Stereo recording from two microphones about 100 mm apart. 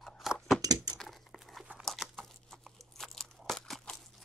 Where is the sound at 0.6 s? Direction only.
40° right (ahead or behind).